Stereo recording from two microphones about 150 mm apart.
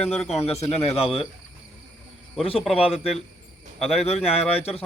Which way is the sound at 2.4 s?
40° left (ahead or behind).